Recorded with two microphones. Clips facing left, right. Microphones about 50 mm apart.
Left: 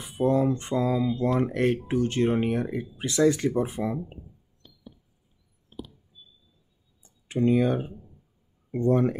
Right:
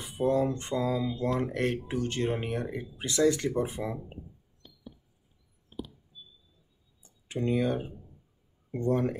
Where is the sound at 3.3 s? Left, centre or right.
Left.